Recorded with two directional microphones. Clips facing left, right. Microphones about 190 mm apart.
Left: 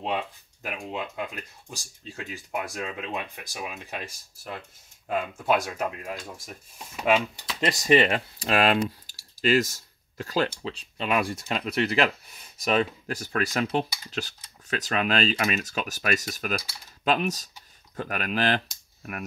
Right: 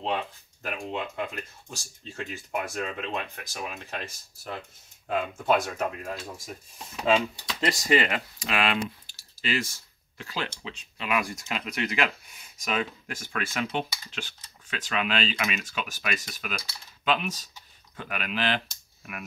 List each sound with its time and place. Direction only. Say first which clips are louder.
0.0 s speech: even; 10° left (ahead or behind)
7.6 s speech: left 3 dB; 25° left (ahead or behind); by 18.6 s 45° left (ahead or behind)